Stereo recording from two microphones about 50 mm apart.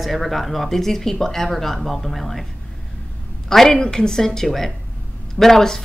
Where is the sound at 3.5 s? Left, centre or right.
Centre.